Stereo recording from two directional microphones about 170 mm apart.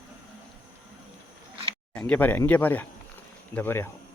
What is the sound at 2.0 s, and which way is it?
Speech, 10° left (ahead or behind).